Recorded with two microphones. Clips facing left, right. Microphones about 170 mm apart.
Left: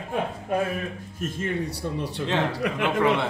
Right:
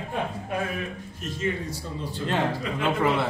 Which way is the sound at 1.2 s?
70° left (ahead or behind).